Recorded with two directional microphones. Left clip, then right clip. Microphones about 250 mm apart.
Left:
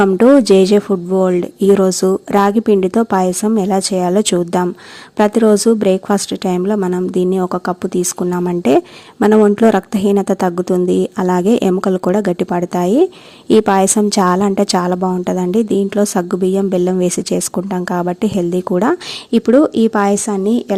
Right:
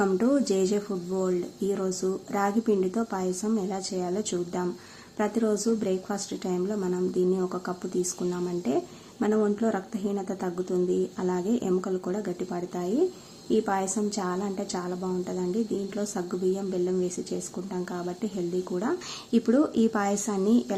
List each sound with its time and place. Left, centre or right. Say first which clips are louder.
0.0 s a woman's voice: left 15 dB; left